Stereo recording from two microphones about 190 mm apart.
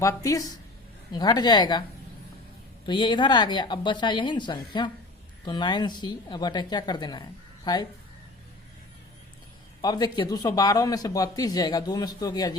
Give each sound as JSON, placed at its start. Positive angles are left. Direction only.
{"t": 0.0, "sound": "speech", "side_deg": 15}
{"t": 2.8, "sound": "speech", "side_deg": 25}
{"t": 9.8, "sound": "speech", "side_deg": 20}